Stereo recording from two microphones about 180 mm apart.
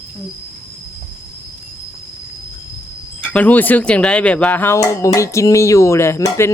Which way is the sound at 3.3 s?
10° left (ahead or behind).